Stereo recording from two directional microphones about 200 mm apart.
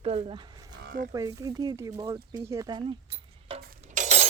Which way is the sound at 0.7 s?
50° right (ahead or behind).